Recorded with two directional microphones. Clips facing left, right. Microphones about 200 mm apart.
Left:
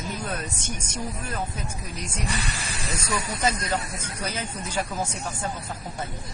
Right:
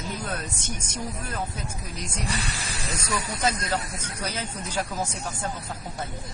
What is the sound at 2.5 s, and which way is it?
Speech, 35° left (ahead or behind).